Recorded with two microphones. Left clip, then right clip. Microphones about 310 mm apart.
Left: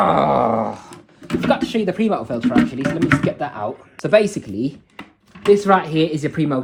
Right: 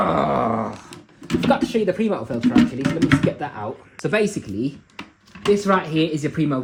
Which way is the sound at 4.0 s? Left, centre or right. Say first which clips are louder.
Left 6 dB; centre.